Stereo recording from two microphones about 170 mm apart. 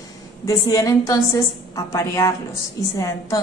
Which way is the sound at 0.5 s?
20° left (ahead or behind).